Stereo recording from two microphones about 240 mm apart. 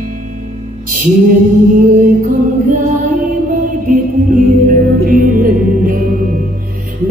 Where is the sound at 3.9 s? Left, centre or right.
Right.